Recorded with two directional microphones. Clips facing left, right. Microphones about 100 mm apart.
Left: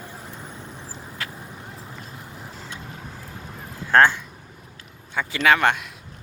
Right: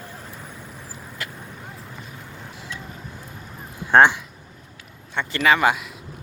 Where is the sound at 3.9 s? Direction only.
15° right (ahead or behind).